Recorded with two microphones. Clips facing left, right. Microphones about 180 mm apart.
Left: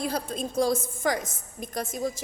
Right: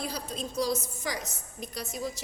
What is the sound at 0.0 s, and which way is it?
A woman's voice, 50° left (ahead or behind).